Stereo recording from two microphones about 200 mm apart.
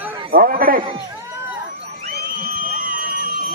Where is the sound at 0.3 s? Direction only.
45° right (ahead or behind).